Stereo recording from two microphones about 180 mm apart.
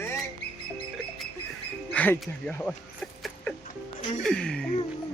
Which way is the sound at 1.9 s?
10° left (ahead or behind).